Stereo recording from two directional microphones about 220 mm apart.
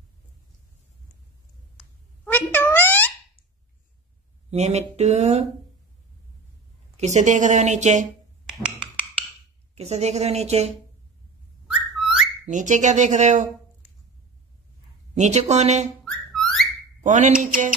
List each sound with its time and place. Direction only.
2.2 s meow: 10° left (ahead or behind)
4.5 s a woman's voice: 30° right (ahead or behind)
7.0 s a woman's voice: 30° right (ahead or behind)
8.5 s finger snapping: 5° right (ahead or behind)
9.8 s a woman's voice: 30° right (ahead or behind)
11.6 s a sound: centre (ahead or behind)
12.4 s a woman's voice: 35° right (ahead or behind)
15.1 s a woman's voice: 30° right (ahead or behind)
16.0 s music: centre (ahead or behind)
17.0 s speech: 35° right (ahead or behind)